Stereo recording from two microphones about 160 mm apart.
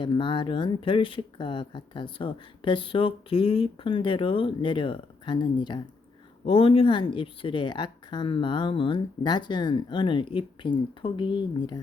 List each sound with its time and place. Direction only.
0.0 s speech: 30° left (ahead or behind)